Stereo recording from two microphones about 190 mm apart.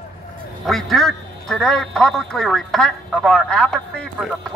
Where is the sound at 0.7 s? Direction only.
Centre (ahead or behind).